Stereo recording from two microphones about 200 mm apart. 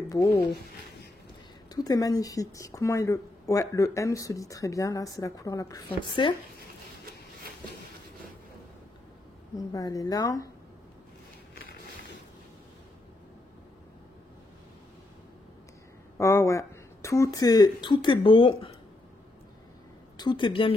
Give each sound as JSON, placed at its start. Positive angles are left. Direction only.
{"t": 0.1, "sound": "speech", "side_deg": 15}
{"t": 1.7, "sound": "speech", "side_deg": 20}
{"t": 7.1, "sound": "a sound", "side_deg": -50}
{"t": 9.7, "sound": "speech", "side_deg": 15}
{"t": 16.2, "sound": "speech", "side_deg": 15}
{"t": 20.2, "sound": "a woman's voice", "side_deg": 25}